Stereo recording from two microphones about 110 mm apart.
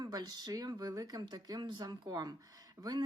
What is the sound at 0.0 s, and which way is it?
Speech, 35° right (ahead or behind).